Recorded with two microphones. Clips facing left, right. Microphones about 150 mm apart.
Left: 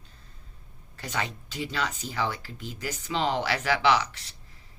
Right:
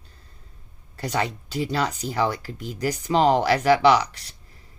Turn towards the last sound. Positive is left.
turn(degrees=-35)  # may be behind; listen again after turning